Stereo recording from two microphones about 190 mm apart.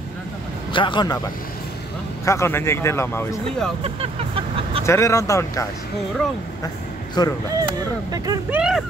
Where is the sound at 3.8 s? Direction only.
30° right (ahead or behind).